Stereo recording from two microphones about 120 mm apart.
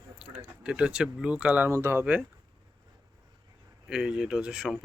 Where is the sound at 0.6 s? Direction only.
10° right (ahead or behind).